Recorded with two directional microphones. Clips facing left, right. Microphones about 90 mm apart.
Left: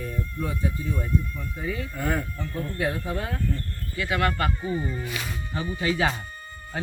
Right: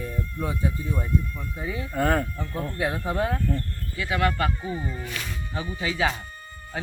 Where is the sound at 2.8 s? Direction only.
15° right (ahead or behind).